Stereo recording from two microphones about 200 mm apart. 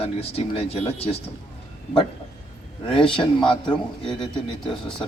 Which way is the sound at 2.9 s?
25° left (ahead or behind).